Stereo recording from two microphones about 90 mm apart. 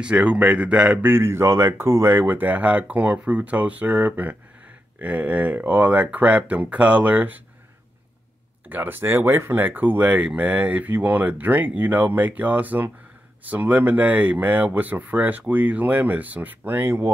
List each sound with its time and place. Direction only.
0.0 s speech: 15° right (ahead or behind)
1.1 s speech: 30° right (ahead or behind)
8.6 s speech: 20° right (ahead or behind)